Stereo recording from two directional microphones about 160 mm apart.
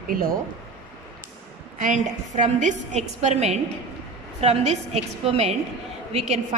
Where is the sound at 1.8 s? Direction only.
50° right (ahead or behind).